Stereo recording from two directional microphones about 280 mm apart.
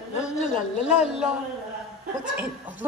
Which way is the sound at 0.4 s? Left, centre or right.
Left.